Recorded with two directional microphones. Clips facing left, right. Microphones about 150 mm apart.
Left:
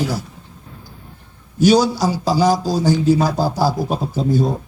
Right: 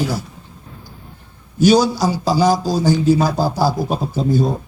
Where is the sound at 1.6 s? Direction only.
10° right (ahead or behind).